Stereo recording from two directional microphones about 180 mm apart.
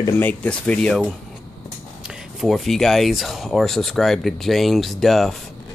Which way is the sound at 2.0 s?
Centre (ahead or behind).